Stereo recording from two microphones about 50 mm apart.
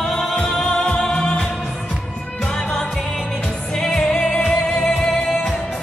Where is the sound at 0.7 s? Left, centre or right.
Left.